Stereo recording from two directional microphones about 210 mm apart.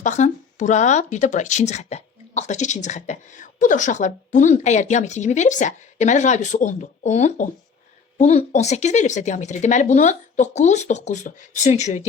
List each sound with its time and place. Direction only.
0.0 s speech: 35° left (ahead or behind)